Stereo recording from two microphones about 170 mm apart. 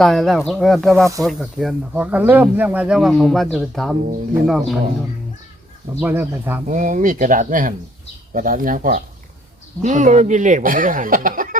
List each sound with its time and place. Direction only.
0.0 s speech: centre (ahead or behind)
6.0 s speech: 10° right (ahead or behind)
6.7 s speech: 50° right (ahead or behind)